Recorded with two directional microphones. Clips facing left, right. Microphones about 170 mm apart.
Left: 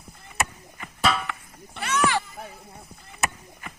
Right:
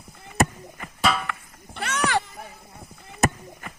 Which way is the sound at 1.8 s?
55° right (ahead or behind).